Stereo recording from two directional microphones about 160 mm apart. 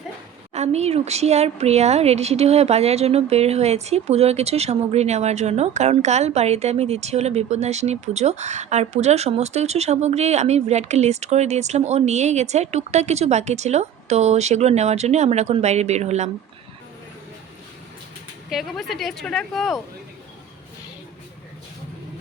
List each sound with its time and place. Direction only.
0.5 s a woman's voice: 45° right (ahead or behind)
18.5 s speech: centre (ahead or behind)